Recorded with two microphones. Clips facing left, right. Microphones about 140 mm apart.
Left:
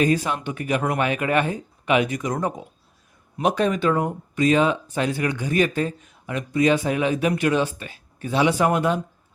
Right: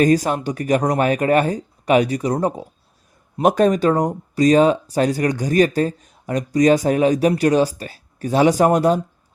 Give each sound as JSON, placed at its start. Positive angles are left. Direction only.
{"t": 0.0, "sound": "speech", "side_deg": -40}
{"t": 3.4, "sound": "speech", "side_deg": -45}